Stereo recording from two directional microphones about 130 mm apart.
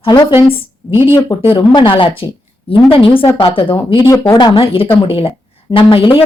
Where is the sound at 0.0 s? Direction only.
40° left (ahead or behind).